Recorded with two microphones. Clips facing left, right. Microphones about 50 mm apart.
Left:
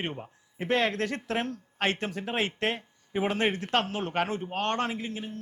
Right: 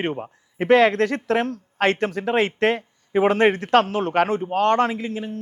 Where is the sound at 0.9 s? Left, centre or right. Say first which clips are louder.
Right 9 dB; right.